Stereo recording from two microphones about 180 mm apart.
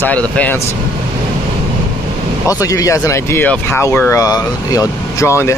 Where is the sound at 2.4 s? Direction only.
20° left (ahead or behind).